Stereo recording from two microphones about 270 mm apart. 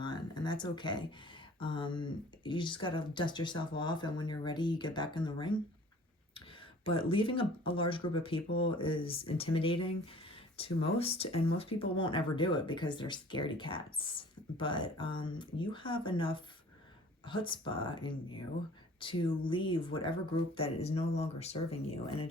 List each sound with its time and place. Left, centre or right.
0.0 s a sound: centre
1.5 s speech: centre
6.8 s speech: centre